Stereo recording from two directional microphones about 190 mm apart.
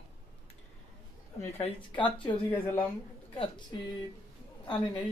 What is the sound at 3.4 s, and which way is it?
Speech, 25° left (ahead or behind).